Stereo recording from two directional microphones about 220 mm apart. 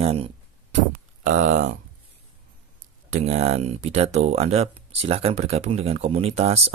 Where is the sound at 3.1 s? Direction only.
30° right (ahead or behind).